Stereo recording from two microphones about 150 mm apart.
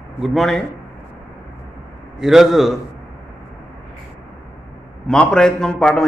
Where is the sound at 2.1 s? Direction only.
Centre (ahead or behind).